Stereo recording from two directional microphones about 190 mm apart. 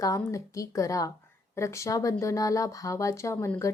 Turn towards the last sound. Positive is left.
turn(degrees=15)  # may be behind; listen again after turning